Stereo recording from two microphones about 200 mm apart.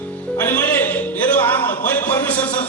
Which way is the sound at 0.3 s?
10° left (ahead or behind).